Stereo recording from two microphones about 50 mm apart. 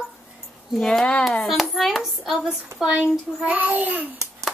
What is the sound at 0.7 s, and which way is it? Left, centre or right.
Speech, centre.